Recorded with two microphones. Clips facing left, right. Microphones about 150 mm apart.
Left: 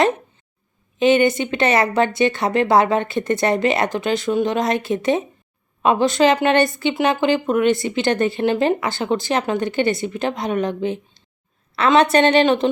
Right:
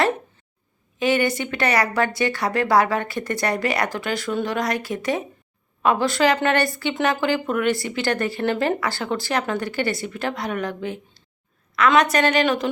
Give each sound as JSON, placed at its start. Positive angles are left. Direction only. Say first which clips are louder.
{"t": 0.9, "sound": "speech", "louder": "left 5 dB", "side_deg": 20}